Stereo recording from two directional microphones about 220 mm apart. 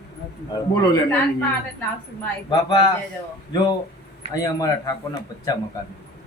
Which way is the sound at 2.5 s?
20° left (ahead or behind).